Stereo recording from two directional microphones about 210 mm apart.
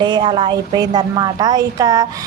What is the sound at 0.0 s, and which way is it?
A woman's voice, 20° right (ahead or behind).